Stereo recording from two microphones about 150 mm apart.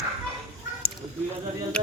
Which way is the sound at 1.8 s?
5° left (ahead or behind).